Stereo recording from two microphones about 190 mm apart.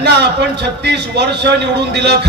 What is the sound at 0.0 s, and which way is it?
A man's voice, 60° right (ahead or behind).